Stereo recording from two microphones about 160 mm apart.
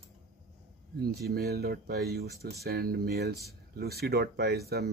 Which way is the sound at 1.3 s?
80° right.